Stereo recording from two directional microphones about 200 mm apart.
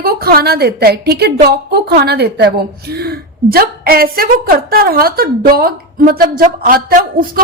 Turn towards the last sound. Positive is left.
turn(degrees=-45)  # may be behind; listen again after turning